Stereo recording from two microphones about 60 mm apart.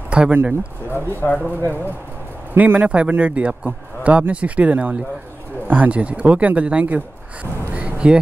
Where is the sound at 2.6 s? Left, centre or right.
Right.